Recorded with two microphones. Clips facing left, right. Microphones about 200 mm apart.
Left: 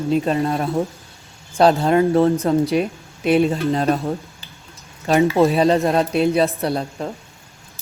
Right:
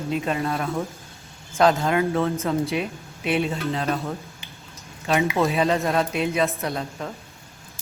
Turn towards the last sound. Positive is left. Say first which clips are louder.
# left 6 dB
turn(degrees=35)  # may be behind; listen again after turning